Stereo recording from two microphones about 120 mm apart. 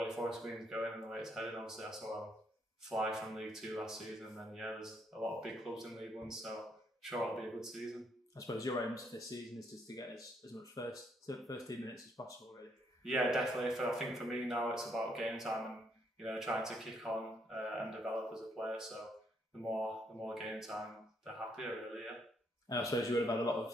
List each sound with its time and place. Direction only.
0.0 s speech: 5° right (ahead or behind)
8.4 s speech: 30° left (ahead or behind)
13.0 s speech: centre (ahead or behind)
22.7 s speech: 30° left (ahead or behind)